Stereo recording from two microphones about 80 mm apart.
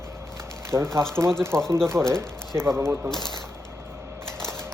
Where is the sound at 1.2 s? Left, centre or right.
Right.